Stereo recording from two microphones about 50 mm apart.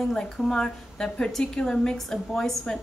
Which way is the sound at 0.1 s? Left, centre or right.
Centre.